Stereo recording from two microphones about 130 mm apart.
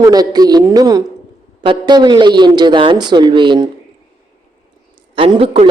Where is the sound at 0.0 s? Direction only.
30° right (ahead or behind).